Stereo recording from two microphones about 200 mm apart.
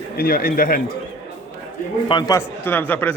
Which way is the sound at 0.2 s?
50° left (ahead or behind).